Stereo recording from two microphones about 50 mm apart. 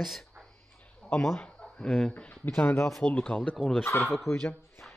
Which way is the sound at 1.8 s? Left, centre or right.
Centre.